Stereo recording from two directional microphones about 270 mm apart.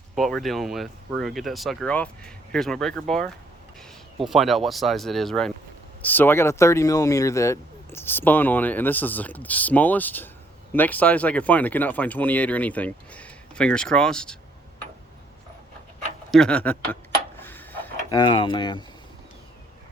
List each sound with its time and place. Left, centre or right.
0.2 s speech: centre
16.3 s speech: centre
17.4 s a sound: centre
18.2 s speech: centre